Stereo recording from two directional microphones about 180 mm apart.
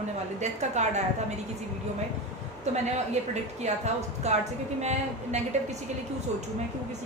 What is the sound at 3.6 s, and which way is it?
A woman's voice, 40° right (ahead or behind).